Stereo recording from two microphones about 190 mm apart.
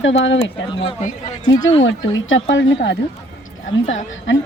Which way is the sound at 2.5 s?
75° left (ahead or behind).